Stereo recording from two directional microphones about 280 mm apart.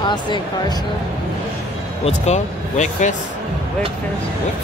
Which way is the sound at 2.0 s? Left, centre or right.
Left.